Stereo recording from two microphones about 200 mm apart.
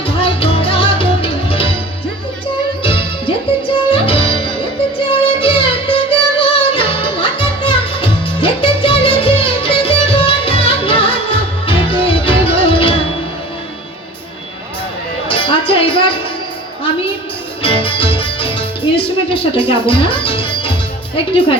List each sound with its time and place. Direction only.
0.0 s music: 25° left (ahead or behind)
2.8 s music: 25° left (ahead or behind)
15.3 s music: 25° left (ahead or behind)
17.6 s music: 25° left (ahead or behind)